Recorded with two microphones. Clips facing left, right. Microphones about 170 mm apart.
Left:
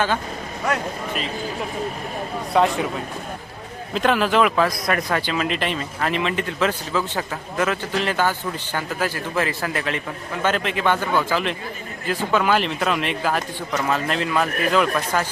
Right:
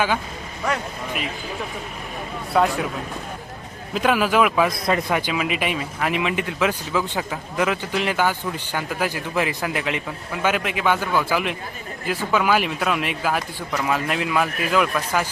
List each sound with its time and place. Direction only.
2.5 s speech: centre (ahead or behind)
3.9 s speech: 5° right (ahead or behind)
4.7 s speech: 25° right (ahead or behind)
5.1 s speech: 10° right (ahead or behind)